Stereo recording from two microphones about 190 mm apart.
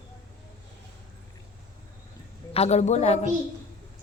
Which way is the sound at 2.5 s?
35° left (ahead or behind).